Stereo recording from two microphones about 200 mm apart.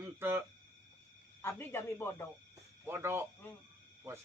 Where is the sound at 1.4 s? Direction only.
10° left (ahead or behind).